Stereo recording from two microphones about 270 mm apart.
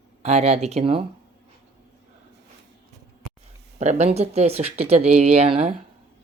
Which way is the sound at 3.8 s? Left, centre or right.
Right.